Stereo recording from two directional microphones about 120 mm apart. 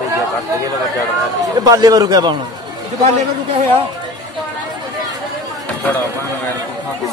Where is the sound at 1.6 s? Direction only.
30° right (ahead or behind).